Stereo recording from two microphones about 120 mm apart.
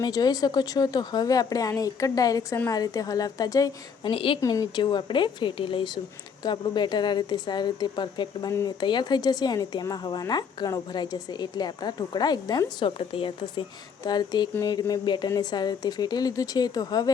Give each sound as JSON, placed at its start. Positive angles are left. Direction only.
{"t": 0.0, "sound": "a woman's voice", "side_deg": 30}
{"t": 4.1, "sound": "a woman's voice", "side_deg": 50}
{"t": 4.4, "sound": "a woman's voice", "side_deg": 30}
{"t": 13.0, "sound": "a woman's voice", "side_deg": 45}